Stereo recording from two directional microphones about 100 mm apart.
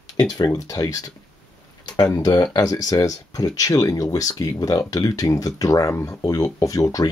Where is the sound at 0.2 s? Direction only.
40° left (ahead or behind).